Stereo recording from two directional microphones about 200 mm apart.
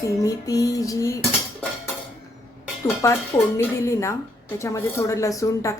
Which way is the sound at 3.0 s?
15° left (ahead or behind).